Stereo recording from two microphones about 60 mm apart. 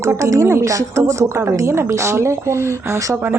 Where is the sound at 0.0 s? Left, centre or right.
Right.